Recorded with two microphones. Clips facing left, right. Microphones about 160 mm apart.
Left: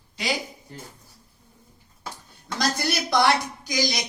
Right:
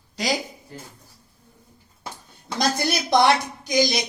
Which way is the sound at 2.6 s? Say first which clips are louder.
Right 3 dB; 20° right (ahead or behind).